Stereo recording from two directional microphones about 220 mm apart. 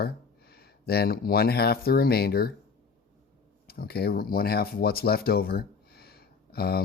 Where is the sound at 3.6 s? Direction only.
45° left (ahead or behind).